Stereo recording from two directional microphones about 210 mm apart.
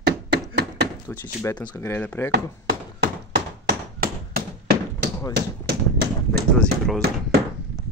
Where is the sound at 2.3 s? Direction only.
50° right (ahead or behind).